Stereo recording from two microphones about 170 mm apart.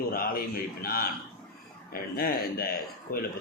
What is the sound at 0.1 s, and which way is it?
A man's voice, 60° left (ahead or behind).